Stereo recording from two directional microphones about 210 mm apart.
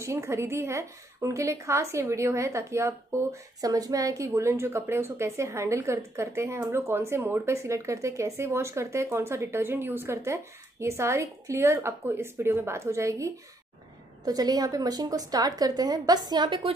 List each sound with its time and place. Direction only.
0.0 s a woman's voice: 15° right (ahead or behind)